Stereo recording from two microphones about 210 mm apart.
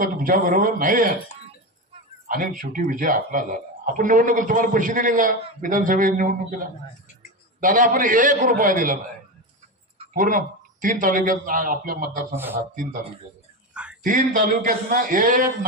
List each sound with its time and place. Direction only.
0.0 s a man's voice: 40° right (ahead or behind)
2.3 s a man's voice: 40° right (ahead or behind)
10.2 s a man's voice: 40° right (ahead or behind)
14.0 s a man's voice: 40° right (ahead or behind)